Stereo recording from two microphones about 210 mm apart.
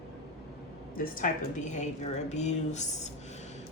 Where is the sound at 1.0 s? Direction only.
40° left (ahead or behind).